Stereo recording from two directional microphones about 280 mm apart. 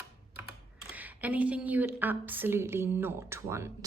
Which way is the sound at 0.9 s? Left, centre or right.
Centre.